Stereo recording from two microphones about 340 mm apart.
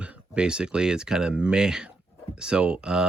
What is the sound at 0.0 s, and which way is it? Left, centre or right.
Speech, centre.